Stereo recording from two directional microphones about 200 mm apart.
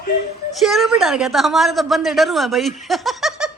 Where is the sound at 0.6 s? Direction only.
Centre (ahead or behind).